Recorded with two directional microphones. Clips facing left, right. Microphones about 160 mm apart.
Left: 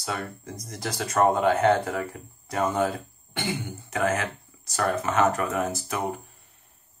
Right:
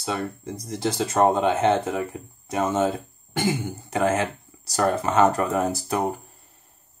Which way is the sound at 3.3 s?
40° right (ahead or behind).